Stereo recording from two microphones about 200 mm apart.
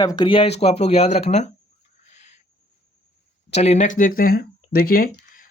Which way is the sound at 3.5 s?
35° left (ahead or behind).